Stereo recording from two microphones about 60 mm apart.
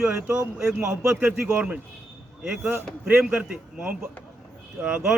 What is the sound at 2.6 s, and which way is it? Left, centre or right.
Speech, right.